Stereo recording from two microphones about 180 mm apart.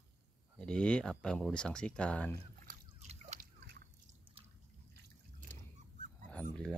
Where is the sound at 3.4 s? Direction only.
60° right (ahead or behind).